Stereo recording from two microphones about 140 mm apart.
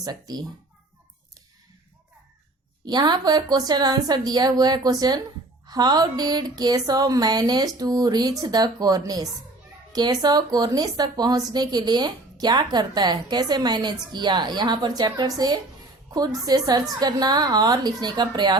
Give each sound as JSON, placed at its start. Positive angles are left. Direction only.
{"t": 0.0, "sound": "speech", "side_deg": -25}
{"t": 2.8, "sound": "speech", "side_deg": -30}